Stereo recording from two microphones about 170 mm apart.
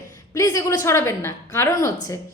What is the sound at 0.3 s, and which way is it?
A woman's voice, 20° left (ahead or behind).